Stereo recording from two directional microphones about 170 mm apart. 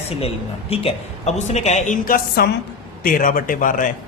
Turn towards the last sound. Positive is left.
turn(degrees=50)  # may be behind; listen again after turning